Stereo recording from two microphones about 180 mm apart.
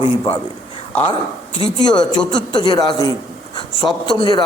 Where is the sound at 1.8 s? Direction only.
25° left (ahead or behind).